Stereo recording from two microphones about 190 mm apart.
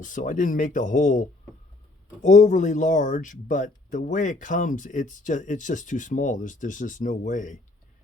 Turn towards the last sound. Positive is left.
turn(degrees=40)  # may be behind; listen again after turning